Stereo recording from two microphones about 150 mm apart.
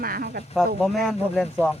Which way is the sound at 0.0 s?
80° right.